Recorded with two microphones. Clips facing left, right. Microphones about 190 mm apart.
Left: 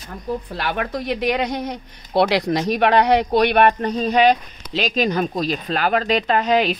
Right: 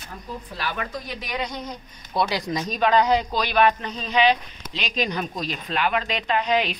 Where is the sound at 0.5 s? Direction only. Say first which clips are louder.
Left 2 dB; 65° left (ahead or behind).